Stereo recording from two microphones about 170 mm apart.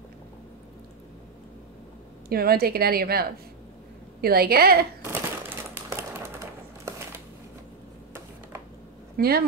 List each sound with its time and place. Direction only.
2.2 s a woman's voice: 65° right (ahead or behind)
5.0 s a sound: 15° right (ahead or behind)
9.1 s speech: 65° right (ahead or behind)